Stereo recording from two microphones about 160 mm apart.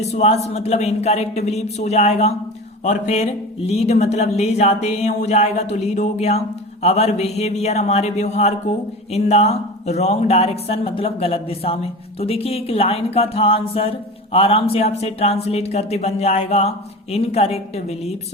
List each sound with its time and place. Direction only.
0.0 s speech: 45° left (ahead or behind)